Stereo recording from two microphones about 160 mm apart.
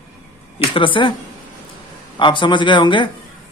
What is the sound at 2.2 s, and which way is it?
Speech, 30° left (ahead or behind).